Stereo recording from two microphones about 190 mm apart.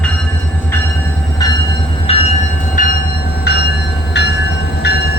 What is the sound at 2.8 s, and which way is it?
Train, 45° left (ahead or behind).